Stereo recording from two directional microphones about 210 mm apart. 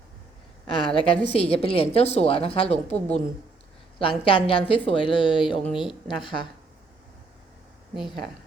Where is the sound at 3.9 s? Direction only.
25° left (ahead or behind).